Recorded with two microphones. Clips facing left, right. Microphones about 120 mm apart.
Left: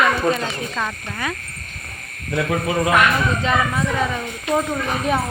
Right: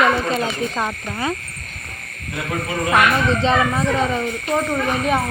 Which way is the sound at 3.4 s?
30° right (ahead or behind).